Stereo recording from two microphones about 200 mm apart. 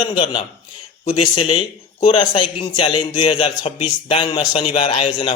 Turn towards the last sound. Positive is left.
turn(degrees=25)  # may be behind; listen again after turning